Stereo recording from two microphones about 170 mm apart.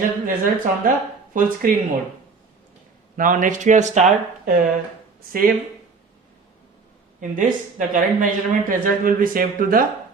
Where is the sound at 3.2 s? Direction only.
50° right (ahead or behind).